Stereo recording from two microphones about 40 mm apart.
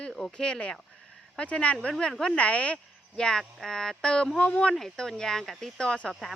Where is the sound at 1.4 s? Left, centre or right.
Left.